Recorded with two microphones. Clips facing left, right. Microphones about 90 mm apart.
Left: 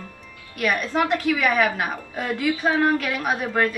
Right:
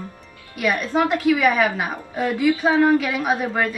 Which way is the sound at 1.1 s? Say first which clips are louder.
Right 3 dB; 5° right (ahead or behind).